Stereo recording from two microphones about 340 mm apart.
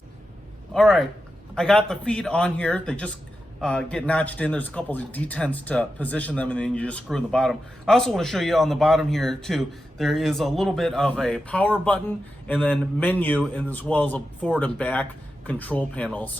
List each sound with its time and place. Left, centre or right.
0.7 s a man's voice: centre